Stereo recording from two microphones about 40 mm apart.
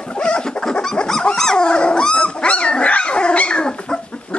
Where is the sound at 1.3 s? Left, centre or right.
Centre.